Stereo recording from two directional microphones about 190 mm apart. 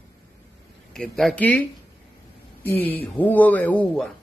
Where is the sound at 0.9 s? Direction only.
5° left (ahead or behind).